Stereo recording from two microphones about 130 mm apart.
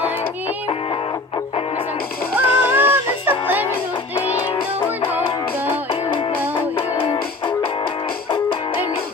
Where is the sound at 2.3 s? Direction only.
15° right (ahead or behind).